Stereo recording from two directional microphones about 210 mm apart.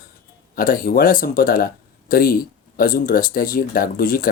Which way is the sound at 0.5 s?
45° left (ahead or behind).